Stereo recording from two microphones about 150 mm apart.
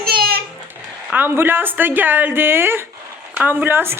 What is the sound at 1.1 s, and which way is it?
Speech, 15° right (ahead or behind).